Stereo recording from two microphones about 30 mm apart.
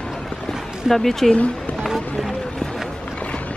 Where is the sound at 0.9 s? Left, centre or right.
Centre.